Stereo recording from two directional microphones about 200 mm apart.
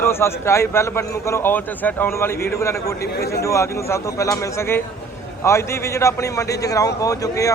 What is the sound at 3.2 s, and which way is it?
Speech, 50° left (ahead or behind).